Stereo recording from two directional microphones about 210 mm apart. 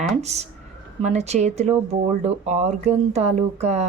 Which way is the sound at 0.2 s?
30° right (ahead or behind).